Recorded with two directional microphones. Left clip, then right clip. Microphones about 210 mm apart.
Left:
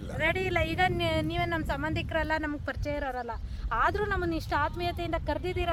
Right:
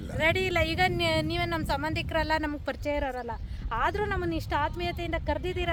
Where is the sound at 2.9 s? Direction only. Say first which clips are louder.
Right 2 dB; 20° right (ahead or behind).